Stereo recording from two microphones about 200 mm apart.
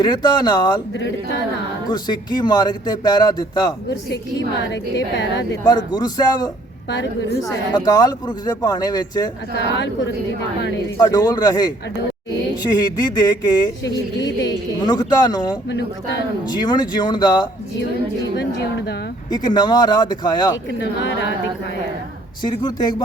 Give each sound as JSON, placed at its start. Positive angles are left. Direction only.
{"t": 0.0, "sound": "a man's voice", "side_deg": 20}
{"t": 1.9, "sound": "a man's voice", "side_deg": 20}
{"t": 4.1, "sound": "speech", "side_deg": 65}
{"t": 5.6, "sound": "a man's voice", "side_deg": 20}
{"t": 6.9, "sound": "speech", "side_deg": 65}
{"t": 7.7, "sound": "a man's voice", "side_deg": 20}
{"t": 10.9, "sound": "a man's voice", "side_deg": 20}
{"t": 13.8, "sound": "a woman's voice", "side_deg": 65}
{"t": 14.4, "sound": "a man's voice", "side_deg": 20}
{"t": 18.3, "sound": "speech", "side_deg": 55}
{"t": 19.3, "sound": "a man's voice", "side_deg": 20}
{"t": 20.7, "sound": "speech", "side_deg": 65}
{"t": 22.4, "sound": "a man's voice", "side_deg": 20}